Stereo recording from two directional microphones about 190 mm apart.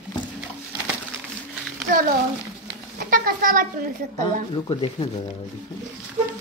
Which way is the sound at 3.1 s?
45° right (ahead or behind).